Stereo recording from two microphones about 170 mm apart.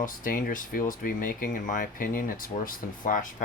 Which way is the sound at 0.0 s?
55° left (ahead or behind).